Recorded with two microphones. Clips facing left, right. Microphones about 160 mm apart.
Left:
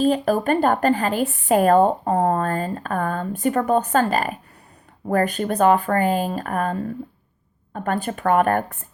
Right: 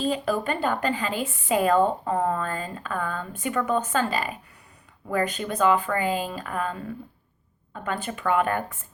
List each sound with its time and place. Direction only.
0.0 s speech: 50° left (ahead or behind)
2.0 s speech: 40° left (ahead or behind)
4.1 s speech: 50° left (ahead or behind)